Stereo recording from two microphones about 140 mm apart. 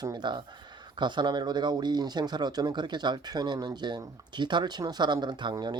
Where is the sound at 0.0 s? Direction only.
30° right (ahead or behind).